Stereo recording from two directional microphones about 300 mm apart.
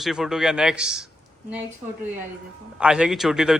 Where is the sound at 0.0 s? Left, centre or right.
Centre.